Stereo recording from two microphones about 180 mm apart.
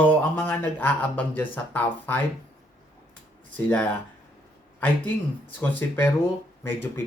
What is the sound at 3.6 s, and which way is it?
Speech, 10° left (ahead or behind).